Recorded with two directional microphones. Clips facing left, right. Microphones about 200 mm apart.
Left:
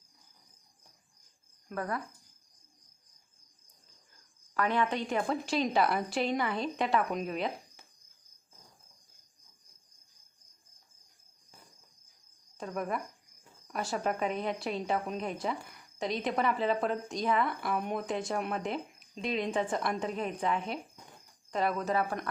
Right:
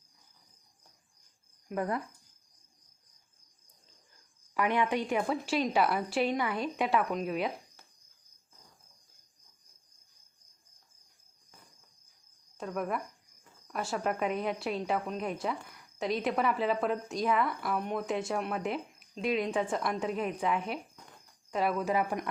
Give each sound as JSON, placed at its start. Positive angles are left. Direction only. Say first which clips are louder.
{"t": 1.7, "sound": "speech", "louder": "right 3 dB", "side_deg": -20}
{"t": 4.5, "sound": "a woman's voice", "louder": "right 1 dB", "side_deg": -15}
{"t": 12.5, "sound": "a woman's voice", "louder": "right 1 dB", "side_deg": 0}